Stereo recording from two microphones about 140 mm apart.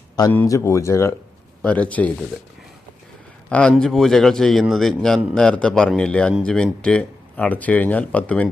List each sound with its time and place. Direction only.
0.4 s speech: 20° left (ahead or behind)
3.5 s a man's voice: 10° left (ahead or behind)